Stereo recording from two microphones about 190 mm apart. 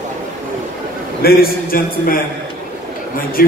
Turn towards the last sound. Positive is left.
turn(degrees=50)  # may be behind; listen again after turning